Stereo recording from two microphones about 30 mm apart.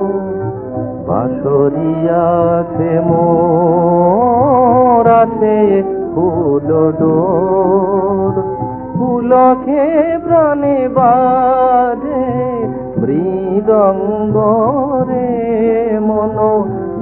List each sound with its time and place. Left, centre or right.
1.1 s mantra: centre
9.0 s music: centre